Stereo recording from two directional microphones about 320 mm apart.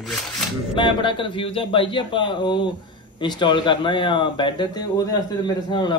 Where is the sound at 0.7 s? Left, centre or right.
Centre.